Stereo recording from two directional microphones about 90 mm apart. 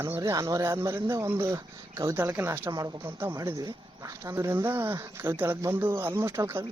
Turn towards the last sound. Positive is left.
turn(degrees=-30)  # may be behind; listen again after turning